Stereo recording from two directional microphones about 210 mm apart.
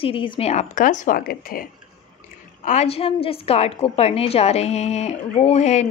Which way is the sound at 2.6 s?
35° left (ahead or behind).